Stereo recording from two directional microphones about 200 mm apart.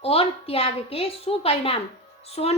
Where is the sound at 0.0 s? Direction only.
30° left (ahead or behind).